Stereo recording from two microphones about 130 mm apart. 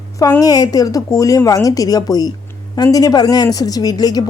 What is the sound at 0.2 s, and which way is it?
Speech, 25° left (ahead or behind).